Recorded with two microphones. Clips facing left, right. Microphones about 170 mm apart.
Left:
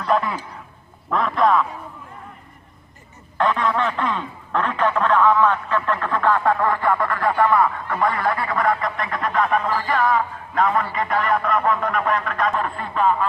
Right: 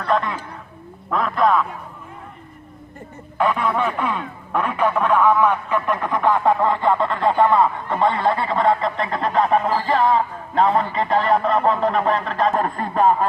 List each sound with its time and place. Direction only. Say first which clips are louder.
0.1 s a man's voice: even; 5° left (ahead or behind)
3.3 s a man's voice: even; 10° right (ahead or behind); by 13.2 s 40° right (ahead or behind)